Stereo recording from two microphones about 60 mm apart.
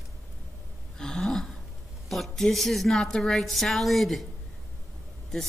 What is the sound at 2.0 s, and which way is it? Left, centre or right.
A woman's voice, centre.